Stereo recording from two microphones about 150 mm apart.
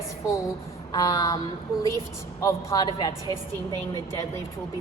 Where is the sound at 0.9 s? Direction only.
25° left (ahead or behind).